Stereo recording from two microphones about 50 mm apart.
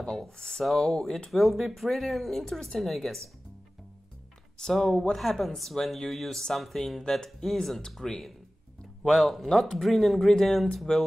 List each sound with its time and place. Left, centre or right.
0.2 s speech: centre
4.6 s speech: centre